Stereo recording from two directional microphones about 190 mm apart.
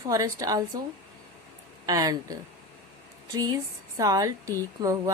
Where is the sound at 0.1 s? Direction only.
20° right (ahead or behind).